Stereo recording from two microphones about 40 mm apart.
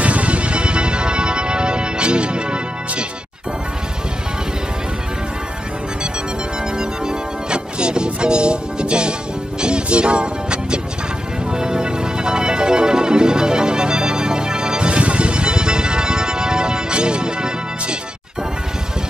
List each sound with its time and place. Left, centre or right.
0.0 s music: right
6.8 s music: right